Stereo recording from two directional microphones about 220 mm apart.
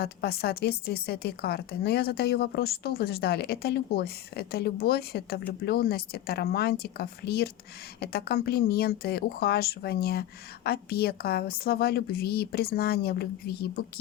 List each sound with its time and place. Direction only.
0.0 s speech: 45° left (ahead or behind)